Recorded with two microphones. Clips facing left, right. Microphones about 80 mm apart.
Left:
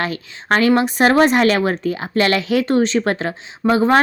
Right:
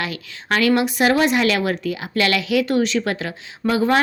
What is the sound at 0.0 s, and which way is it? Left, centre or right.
Speech, left.